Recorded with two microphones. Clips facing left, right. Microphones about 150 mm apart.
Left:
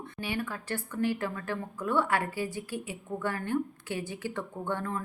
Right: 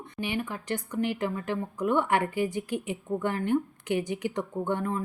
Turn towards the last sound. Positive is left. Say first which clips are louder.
# right 4 dB
turn(degrees=-15)  # may be behind; listen again after turning